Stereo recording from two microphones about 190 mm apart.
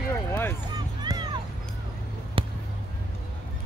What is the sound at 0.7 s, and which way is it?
Music, 20° right (ahead or behind).